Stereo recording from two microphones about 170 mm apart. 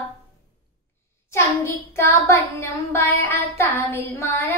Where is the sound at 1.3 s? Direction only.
15° left (ahead or behind).